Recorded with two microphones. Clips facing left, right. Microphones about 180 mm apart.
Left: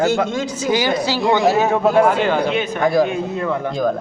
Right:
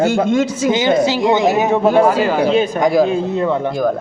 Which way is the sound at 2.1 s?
5° right (ahead or behind).